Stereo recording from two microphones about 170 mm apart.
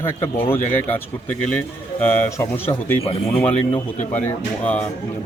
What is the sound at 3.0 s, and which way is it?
Speech, 35° left (ahead or behind).